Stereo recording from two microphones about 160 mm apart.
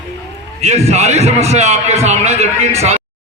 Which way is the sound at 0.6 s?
45° right (ahead or behind).